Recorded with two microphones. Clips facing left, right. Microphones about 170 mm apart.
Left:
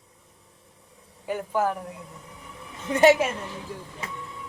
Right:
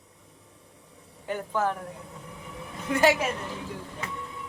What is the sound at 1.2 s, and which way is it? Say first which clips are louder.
Speech: left 2 dB; 10° left (ahead or behind).